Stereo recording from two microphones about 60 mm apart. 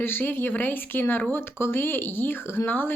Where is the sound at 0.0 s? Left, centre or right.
Left.